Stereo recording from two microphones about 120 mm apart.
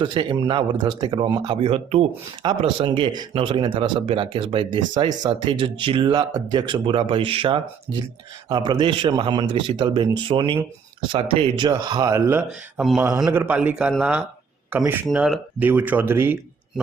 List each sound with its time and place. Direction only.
0.0 s speech: 40° right (ahead or behind)
4.0 s speech: 45° right (ahead or behind)
12.1 s speech: 20° right (ahead or behind)
12.5 s speech: centre (ahead or behind)
13.0 s speech: 30° right (ahead or behind)
13.3 s speech: 15° right (ahead or behind)
15.1 s speech: centre (ahead or behind)
15.5 s speech: 15° right (ahead or behind)